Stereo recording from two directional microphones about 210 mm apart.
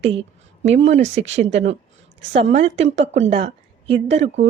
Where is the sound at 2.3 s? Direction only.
30° right (ahead or behind).